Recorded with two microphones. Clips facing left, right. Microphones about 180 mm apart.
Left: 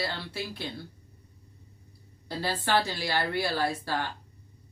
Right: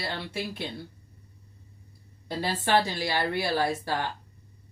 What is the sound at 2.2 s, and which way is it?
Speech, 20° right (ahead or behind).